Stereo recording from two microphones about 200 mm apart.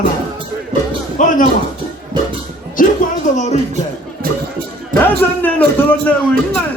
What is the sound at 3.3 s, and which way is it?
Music, 35° left (ahead or behind).